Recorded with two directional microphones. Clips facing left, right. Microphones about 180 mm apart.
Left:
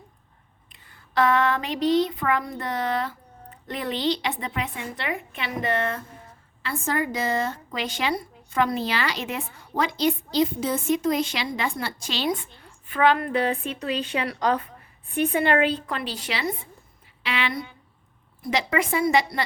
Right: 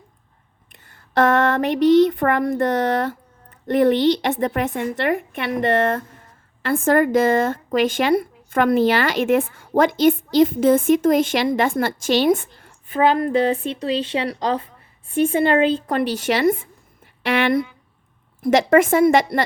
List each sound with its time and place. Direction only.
1.2 s a sound: 75° right (ahead or behind); by 2.6 s 50° right (ahead or behind)
2.6 s speech: 70° right (ahead or behind)
3.7 s speech: 55° right (ahead or behind)
4.9 s a sound: 65° right (ahead or behind)
6.6 s speech: 50° right (ahead or behind)
12.9 s a woman's voice: 35° right (ahead or behind)
15.9 s speech: 50° right (ahead or behind)
18.4 s speech: 50° right (ahead or behind)